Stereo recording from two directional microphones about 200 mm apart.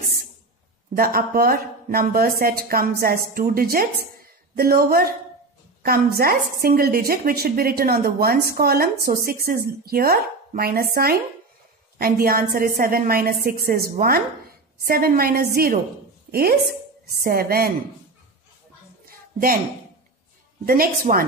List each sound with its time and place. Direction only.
0.9 s a woman's voice: 45° right (ahead or behind)
19.0 s a sound: 45° right (ahead or behind)
20.6 s speech: 45° right (ahead or behind)